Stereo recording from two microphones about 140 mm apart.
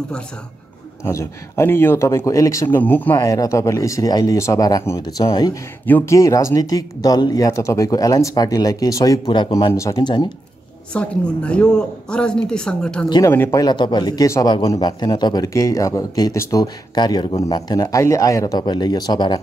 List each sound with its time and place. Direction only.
1.0 s speech: 20° left (ahead or behind)
3.2 s speech: 25° left (ahead or behind)
5.9 s speech: 15° left (ahead or behind); by 10.3 s 30° left (ahead or behind)
10.9 s speech: 10° left (ahead or behind)
13.6 s speech: 30° left (ahead or behind)